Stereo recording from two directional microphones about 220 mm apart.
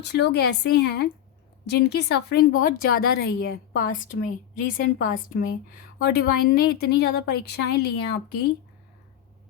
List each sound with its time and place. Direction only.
0.0 s a woman's voice: 50° left (ahead or behind)